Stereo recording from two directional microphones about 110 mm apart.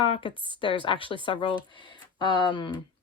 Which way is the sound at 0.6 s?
50° left (ahead or behind).